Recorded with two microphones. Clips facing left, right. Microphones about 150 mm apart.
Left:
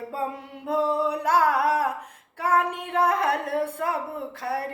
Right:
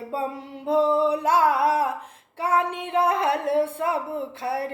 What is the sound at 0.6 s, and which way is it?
Singing, 25° right (ahead or behind).